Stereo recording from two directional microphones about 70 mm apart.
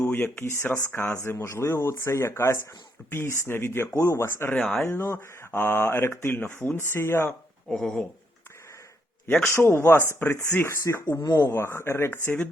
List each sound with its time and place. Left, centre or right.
0.0 s speech: left
7.8 s speech: centre
9.5 s speech: left
10.8 s speech: left